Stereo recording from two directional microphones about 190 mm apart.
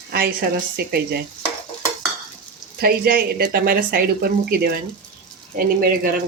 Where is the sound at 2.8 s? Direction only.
50° right (ahead or behind).